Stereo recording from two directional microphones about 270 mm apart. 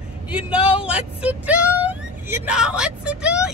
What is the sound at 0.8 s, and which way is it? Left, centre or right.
Speech, centre.